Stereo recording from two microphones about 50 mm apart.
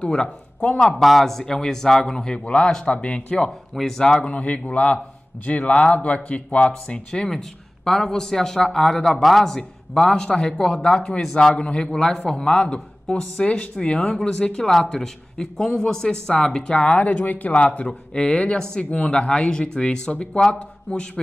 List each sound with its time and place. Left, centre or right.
0.0 s speech: centre
0.8 s a man's voice: centre; by 3.4 s left
3.4 s a man's voice: centre
4.0 s a man's voice: left